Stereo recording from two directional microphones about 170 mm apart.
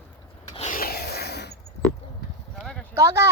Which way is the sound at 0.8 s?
65° left (ahead or behind).